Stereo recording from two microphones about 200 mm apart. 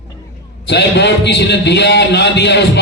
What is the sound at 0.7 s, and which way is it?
A man's voice, 60° left (ahead or behind).